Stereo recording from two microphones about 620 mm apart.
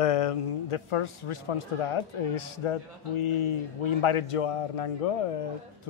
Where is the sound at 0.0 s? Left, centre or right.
Left.